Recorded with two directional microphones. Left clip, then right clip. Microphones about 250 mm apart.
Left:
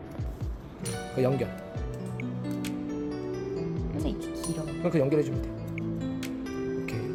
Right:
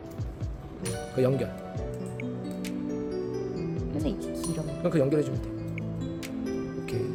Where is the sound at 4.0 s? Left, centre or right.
Right.